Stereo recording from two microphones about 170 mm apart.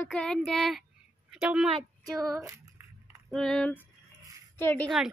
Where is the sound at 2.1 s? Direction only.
20° right (ahead or behind).